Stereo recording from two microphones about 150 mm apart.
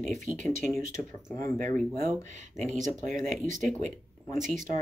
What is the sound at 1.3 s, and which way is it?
Speech, 20° left (ahead or behind).